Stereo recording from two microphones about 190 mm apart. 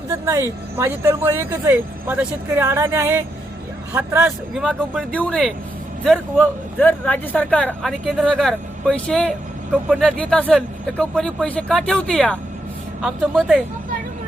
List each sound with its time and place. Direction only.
0.1 s speech: 15° right (ahead or behind)